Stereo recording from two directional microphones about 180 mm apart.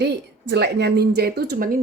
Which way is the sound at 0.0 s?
70° right (ahead or behind).